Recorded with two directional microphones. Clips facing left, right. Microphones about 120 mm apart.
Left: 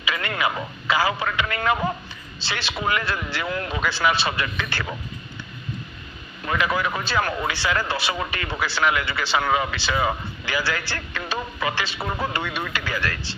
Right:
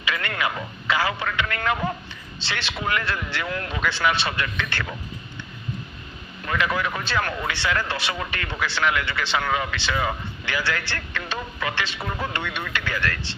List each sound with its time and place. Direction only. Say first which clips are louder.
0.0 s radio: left 1 dB; 5° left (ahead or behind)
1.3 s a man's voice: left 2 dB; 10° left (ahead or behind)
6.4 s a man's voice: left 1 dB; 15° left (ahead or behind)
8.1 s speech: left 2 dB; 15° left (ahead or behind)
9.5 s speech: left 3 dB; 15° left (ahead or behind)
9.7 s a man's voice: left 2 dB; 5° left (ahead or behind)
11.9 s a man's voice: left 2 dB; 30° left (ahead or behind)
12.7 s speech: even; 5° left (ahead or behind)